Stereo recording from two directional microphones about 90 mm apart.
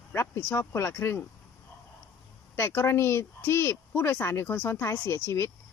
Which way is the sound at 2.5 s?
30° left (ahead or behind).